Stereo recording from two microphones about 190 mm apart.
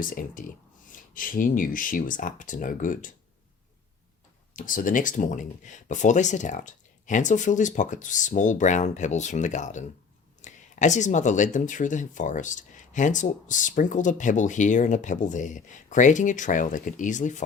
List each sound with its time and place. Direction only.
0.0 s speech: 45° left (ahead or behind)
4.5 s speech: 45° left (ahead or behind)